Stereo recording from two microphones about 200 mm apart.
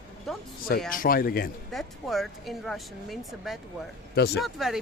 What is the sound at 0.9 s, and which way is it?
Speech, 45° left (ahead or behind).